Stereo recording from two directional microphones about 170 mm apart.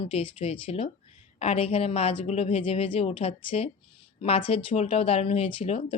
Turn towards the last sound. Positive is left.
turn(degrees=35)  # may be behind; listen again after turning